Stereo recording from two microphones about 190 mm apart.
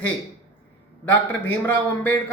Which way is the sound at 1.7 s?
10° left (ahead or behind).